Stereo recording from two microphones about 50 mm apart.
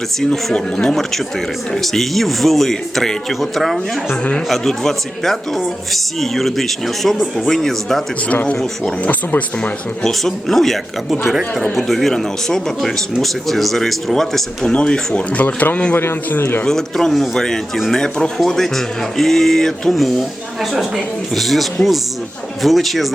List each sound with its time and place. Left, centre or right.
0.5 s speech: centre
1.7 s speech: centre
4.1 s speech: left
4.4 s speech: centre
8.3 s speech: left
10.0 s speech: centre
11.8 s speech: centre
16.0 s a man's voice: left
16.6 s speech: centre